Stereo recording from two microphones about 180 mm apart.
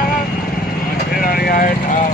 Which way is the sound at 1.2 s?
55° left (ahead or behind).